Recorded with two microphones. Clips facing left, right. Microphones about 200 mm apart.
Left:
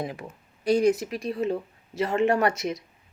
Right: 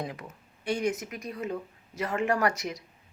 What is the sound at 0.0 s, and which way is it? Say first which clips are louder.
A woman's voice: left 4 dB; 25° left (ahead or behind).